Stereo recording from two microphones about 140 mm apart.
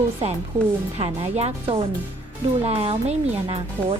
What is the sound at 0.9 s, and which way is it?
Speech, 50° right (ahead or behind).